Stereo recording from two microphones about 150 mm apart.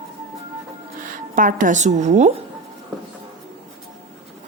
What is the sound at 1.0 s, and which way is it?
Speech, 65° right (ahead or behind).